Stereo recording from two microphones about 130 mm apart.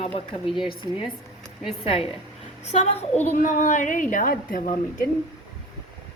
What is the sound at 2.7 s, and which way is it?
Speech, 55° left (ahead or behind).